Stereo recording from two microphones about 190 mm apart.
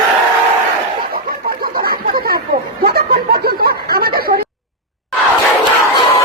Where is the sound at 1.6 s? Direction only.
50° right (ahead or behind).